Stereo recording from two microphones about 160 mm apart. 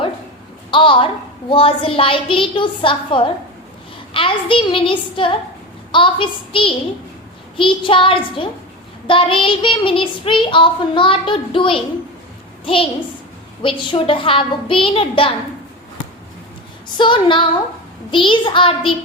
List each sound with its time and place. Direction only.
0.7 s a child's voice: 30° left (ahead or behind)
17.0 s a child's voice: 30° left (ahead or behind)